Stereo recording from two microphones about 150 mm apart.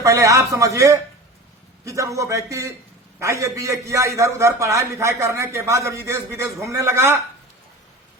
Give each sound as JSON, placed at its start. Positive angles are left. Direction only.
{"t": 0.0, "sound": "a man's voice", "side_deg": -20}